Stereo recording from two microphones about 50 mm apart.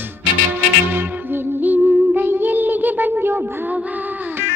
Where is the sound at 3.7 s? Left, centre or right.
Right.